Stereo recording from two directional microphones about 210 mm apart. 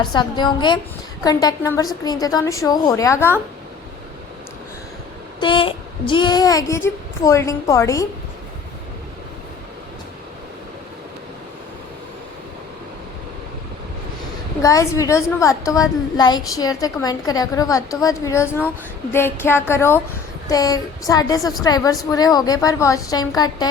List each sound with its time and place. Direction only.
0.1 s a woman's voice: 20° left (ahead or behind)
5.4 s a woman's voice: 25° left (ahead or behind)
14.6 s a woman's voice: 15° left (ahead or behind)